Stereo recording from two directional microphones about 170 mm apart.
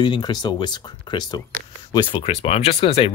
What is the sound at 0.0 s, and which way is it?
Speech, 25° left (ahead or behind).